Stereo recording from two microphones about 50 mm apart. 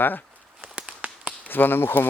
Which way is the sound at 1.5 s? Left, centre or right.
Left.